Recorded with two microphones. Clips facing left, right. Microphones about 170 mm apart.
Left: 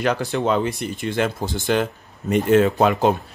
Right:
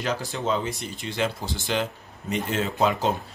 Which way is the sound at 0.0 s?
65° left (ahead or behind).